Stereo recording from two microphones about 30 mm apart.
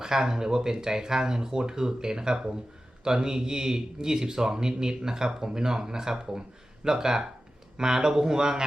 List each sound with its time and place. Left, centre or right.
0.0 s speech: centre